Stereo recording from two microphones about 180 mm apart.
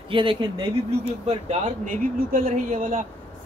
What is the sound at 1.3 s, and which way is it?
Speech, 40° right (ahead or behind).